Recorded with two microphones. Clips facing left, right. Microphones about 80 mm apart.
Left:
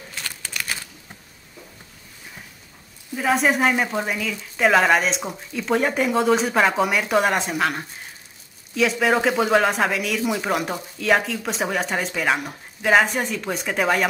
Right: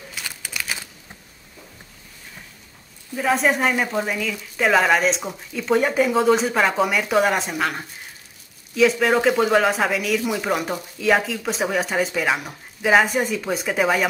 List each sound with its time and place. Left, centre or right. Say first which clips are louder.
0.1 s crumpling: even; centre
3.2 s a woman's voice: even; centre